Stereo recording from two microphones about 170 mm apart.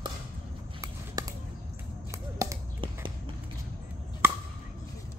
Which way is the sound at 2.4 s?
25° right (ahead or behind).